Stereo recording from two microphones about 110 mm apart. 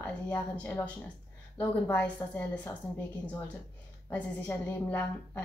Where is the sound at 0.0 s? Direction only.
15° left (ahead or behind).